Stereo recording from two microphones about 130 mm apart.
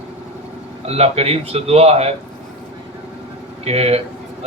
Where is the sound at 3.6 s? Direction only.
50° right (ahead or behind).